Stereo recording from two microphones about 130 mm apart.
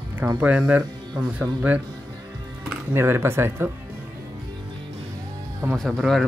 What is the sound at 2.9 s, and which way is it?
Speech, 20° right (ahead or behind).